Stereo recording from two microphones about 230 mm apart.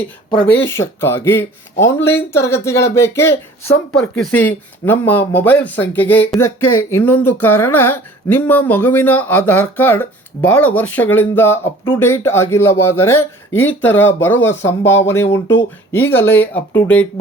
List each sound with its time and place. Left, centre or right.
0.6 s speech: centre
6.4 s speech: left
6.9 s speech: centre